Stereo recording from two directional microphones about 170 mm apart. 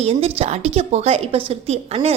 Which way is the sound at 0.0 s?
35° right (ahead or behind).